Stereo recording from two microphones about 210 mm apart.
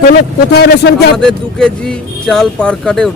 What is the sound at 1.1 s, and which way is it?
Speech, 5° left (ahead or behind).